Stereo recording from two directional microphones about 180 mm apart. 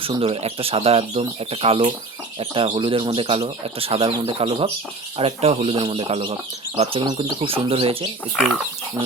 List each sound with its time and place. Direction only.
0.0 s speech: 30° right (ahead or behind)